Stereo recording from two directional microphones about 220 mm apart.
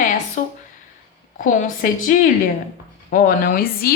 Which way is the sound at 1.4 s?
35° left (ahead or behind).